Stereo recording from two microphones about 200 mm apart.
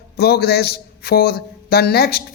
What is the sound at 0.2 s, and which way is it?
A man's voice, 50° left (ahead or behind).